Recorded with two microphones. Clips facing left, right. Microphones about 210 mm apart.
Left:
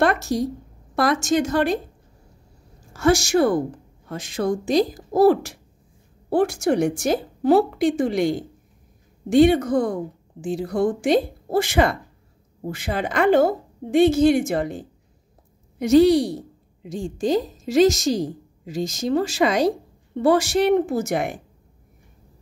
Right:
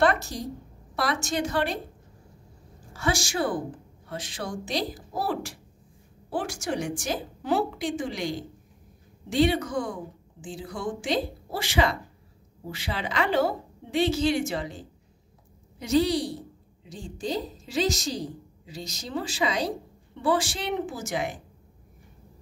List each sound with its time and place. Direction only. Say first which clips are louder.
0.9 s a woman's voice: left 8 dB; 45° left (ahead or behind)
2.9 s a woman's voice: left 10 dB; 45° left (ahead or behind)
6.3 s a woman's voice: left 10 dB; 55° left (ahead or behind)
16.8 s a woman's voice: left 9 dB; 45° left (ahead or behind)
19.2 s a woman's voice: left 5 dB; 70° left (ahead or behind)